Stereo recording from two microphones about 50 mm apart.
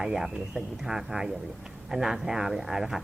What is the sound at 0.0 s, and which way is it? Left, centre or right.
Speech, centre.